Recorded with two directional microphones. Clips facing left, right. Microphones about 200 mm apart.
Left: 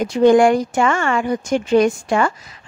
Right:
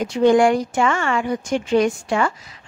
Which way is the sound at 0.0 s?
45° left (ahead or behind).